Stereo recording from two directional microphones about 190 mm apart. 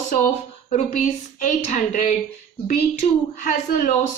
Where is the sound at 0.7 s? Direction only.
35° left (ahead or behind).